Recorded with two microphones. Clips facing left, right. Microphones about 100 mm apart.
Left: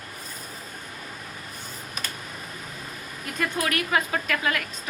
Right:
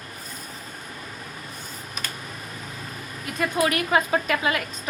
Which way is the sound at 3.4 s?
20° right (ahead or behind).